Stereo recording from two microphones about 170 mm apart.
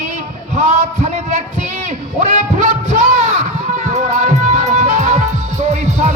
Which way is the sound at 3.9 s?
40° right (ahead or behind).